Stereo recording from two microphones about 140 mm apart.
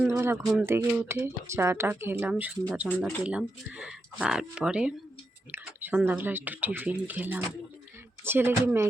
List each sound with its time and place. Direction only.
0.1 s speech: 20° right (ahead or behind)